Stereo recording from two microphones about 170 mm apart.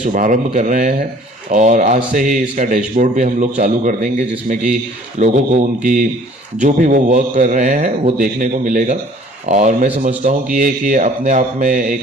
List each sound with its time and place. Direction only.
0.0 s speech: 50° right (ahead or behind)